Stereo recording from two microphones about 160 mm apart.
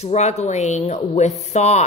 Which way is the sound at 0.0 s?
45° left (ahead or behind).